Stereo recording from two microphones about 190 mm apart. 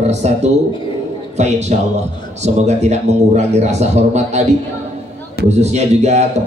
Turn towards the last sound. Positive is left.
turn(degrees=-35)  # may be behind; listen again after turning